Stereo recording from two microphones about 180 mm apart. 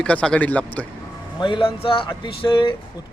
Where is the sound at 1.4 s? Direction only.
25° left (ahead or behind).